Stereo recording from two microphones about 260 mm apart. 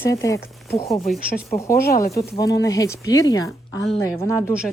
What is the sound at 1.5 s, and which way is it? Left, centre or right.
Speech, centre.